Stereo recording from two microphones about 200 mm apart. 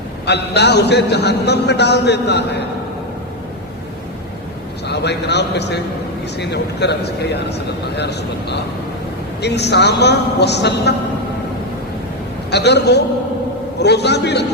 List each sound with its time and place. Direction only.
0.3 s a man's voice: 55° left (ahead or behind)
4.9 s a man's voice: 60° left (ahead or behind)
12.5 s a man's voice: 55° left (ahead or behind)